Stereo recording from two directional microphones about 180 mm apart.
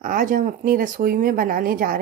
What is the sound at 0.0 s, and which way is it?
A woman's voice, 50° right (ahead or behind).